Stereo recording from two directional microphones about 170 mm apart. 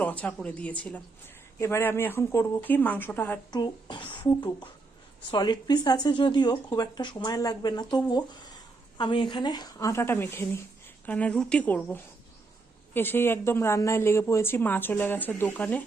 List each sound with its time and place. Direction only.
0.0 s speech: 10° left (ahead or behind)
3.5 s speech: 25° left (ahead or behind); by 15.8 s 10° left (ahead or behind)